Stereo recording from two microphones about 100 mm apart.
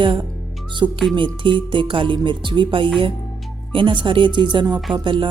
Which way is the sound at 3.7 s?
55° right (ahead or behind).